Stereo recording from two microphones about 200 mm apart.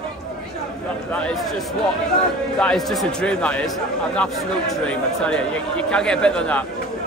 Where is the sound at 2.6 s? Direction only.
Centre (ahead or behind).